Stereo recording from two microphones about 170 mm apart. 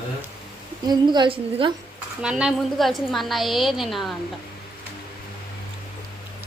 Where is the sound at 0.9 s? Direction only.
25° right (ahead or behind).